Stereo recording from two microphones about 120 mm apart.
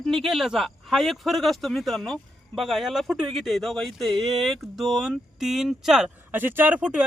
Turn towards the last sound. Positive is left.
turn(degrees=-10)  # may be behind; listen again after turning